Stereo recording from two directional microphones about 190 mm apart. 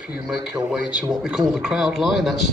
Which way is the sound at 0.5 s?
5° right (ahead or behind).